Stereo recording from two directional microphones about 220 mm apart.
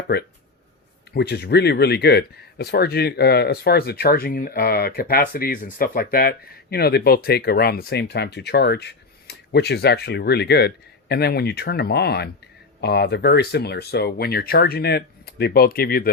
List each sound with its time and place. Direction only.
0.1 s speech: 45° left (ahead or behind)